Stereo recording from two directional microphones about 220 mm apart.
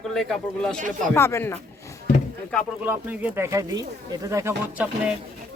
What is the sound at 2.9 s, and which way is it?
Speech, 10° right (ahead or behind).